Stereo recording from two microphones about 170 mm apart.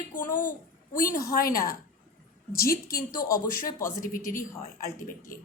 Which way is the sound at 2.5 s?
60° left (ahead or behind).